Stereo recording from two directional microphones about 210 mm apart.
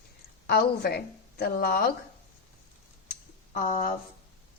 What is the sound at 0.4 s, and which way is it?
Speech, 50° left (ahead or behind).